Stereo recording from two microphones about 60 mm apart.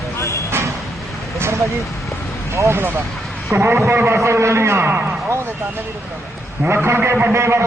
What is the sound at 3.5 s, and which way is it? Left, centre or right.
A man's voice, right.